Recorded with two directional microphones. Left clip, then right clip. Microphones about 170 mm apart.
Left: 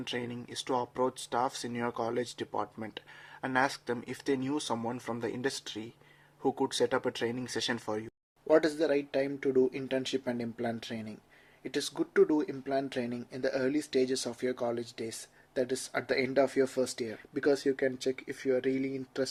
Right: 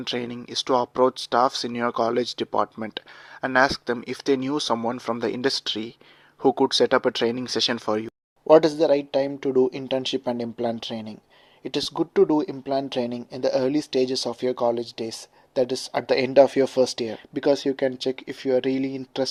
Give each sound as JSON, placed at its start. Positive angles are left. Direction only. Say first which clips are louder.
{"t": 0.0, "sound": "speech", "louder": "right 8 dB", "side_deg": -35}